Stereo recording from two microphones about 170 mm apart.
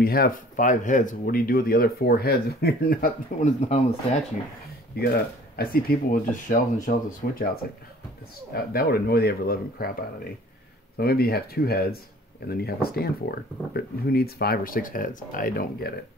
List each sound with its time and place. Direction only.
0.0 s speech: 60° left (ahead or behind)
3.3 s speech: 45° left (ahead or behind)
4.9 s speech: 65° left (ahead or behind)
8.5 s speech: 65° left (ahead or behind)
11.0 s speech: 65° left (ahead or behind)